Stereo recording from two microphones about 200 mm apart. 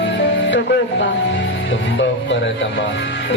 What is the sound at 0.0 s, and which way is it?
Speech, 65° left (ahead or behind).